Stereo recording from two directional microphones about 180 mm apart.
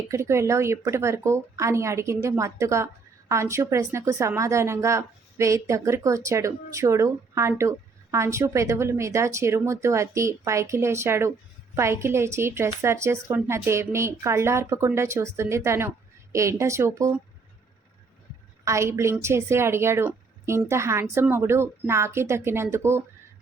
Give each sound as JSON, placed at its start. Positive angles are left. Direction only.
{"t": 0.1, "sound": "speech", "side_deg": -15}
{"t": 18.6, "sound": "speech", "side_deg": -15}